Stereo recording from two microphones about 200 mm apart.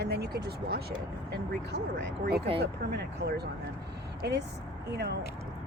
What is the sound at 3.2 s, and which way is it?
Speech, 55° right (ahead or behind).